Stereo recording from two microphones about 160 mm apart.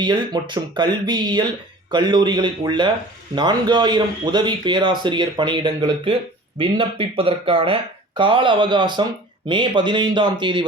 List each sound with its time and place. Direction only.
0.0 s speech: 30° right (ahead or behind)